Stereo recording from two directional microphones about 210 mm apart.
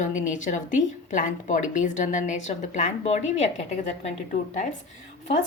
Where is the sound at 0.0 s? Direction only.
35° left (ahead or behind).